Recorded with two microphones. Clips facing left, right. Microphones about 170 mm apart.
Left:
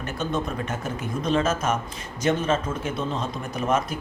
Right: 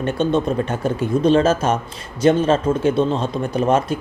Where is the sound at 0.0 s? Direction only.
30° right (ahead or behind).